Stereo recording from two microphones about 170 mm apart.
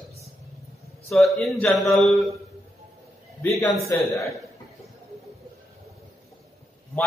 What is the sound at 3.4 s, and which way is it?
Speech, 15° left (ahead or behind).